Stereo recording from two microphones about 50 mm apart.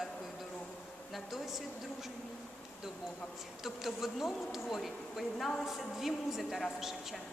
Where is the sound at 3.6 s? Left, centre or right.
Centre.